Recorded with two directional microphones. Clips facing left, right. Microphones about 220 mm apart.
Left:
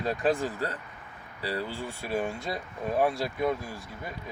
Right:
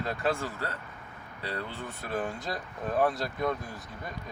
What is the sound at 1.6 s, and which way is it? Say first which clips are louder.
Speech: left 3 dB; 30° left (ahead or behind).